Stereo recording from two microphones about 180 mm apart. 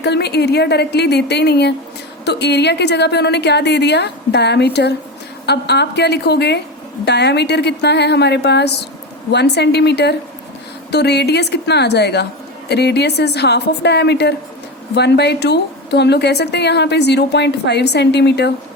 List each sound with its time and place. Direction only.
0.0 s a woman's voice: 65° left (ahead or behind)